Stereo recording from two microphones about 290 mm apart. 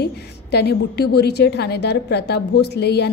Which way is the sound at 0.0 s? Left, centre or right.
Left.